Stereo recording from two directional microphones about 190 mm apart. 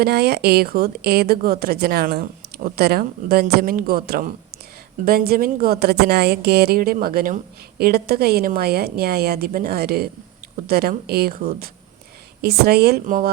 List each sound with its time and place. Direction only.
0.0 s a woman's voice: 60° right (ahead or behind)